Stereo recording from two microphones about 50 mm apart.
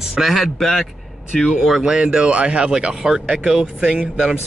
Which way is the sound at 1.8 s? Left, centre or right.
Centre.